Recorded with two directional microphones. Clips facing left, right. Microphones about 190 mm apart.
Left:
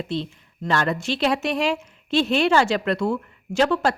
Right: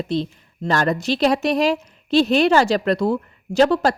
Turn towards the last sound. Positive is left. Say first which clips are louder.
# right 4 dB
turn(degrees=-35)  # may be behind; listen again after turning